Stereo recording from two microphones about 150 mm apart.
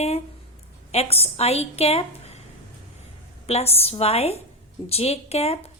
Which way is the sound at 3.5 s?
45° left (ahead or behind).